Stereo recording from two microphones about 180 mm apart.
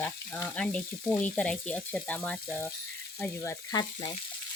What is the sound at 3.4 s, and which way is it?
Frying, 20° left (ahead or behind).